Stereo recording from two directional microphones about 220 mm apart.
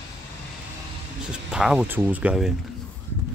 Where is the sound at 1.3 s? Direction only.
5° right (ahead or behind).